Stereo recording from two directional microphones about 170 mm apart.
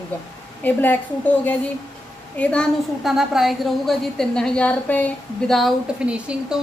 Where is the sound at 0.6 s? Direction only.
10° left (ahead or behind).